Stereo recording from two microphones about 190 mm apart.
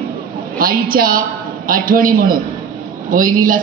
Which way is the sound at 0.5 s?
50° right (ahead or behind).